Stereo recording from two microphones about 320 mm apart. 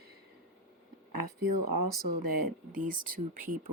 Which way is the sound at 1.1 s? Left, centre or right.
Right.